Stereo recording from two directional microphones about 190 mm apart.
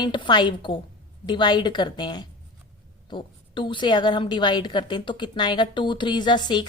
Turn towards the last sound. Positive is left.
turn(degrees=25)  # may be behind; listen again after turning